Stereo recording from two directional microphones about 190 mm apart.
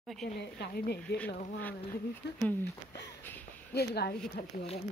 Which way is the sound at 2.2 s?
60° left (ahead or behind).